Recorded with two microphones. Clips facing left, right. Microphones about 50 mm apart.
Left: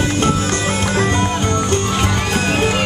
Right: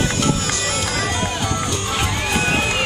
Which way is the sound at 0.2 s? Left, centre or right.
Left.